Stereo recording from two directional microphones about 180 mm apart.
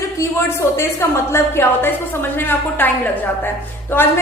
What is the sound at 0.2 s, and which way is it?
A woman's voice, 15° left (ahead or behind).